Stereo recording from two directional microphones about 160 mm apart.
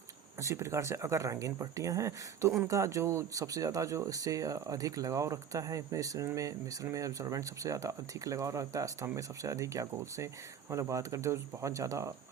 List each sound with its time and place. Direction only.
0.4 s speech: 20° right (ahead or behind)